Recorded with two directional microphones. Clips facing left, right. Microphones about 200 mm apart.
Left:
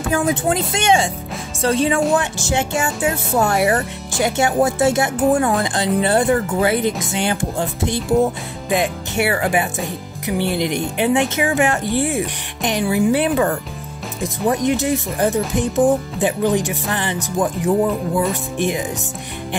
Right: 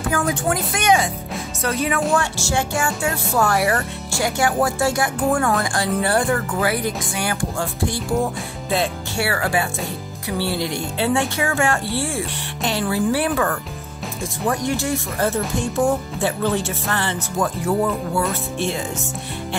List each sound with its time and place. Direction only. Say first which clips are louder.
0.1 s speech: left 4 dB; 25° left (ahead or behind)